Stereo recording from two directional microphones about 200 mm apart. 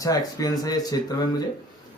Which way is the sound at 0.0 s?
15° left (ahead or behind).